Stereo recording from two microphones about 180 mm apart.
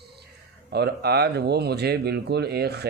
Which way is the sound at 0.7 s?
60° right (ahead or behind).